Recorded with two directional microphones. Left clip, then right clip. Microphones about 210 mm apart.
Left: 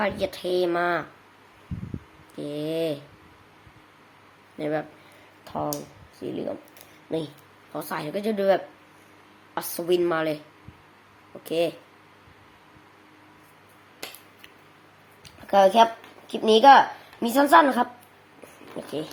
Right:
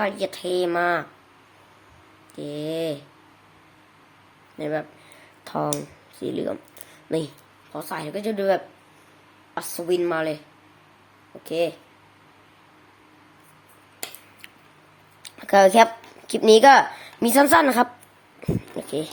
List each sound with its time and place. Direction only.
0.0 s speech: 5° right (ahead or behind)
2.3 s a woman's voice: 5° right (ahead or behind)
4.5 s a woman's voice: centre (ahead or behind)
5.5 s speech: 20° right (ahead or behind)
7.7 s a woman's voice: centre (ahead or behind)
11.4 s a woman's voice: centre (ahead or behind)
15.2 s a sound: 20° right (ahead or behind)
16.3 s a woman's voice: 20° right (ahead or behind)
18.8 s printer: 15° right (ahead or behind)